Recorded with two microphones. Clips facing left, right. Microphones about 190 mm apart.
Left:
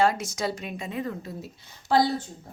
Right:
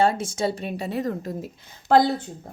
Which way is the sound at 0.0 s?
30° right (ahead or behind).